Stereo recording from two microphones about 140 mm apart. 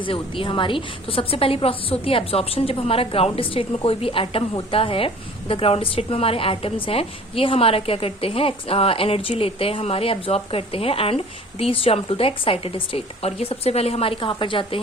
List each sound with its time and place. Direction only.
0.0 s a woman's voice: 40° left (ahead or behind)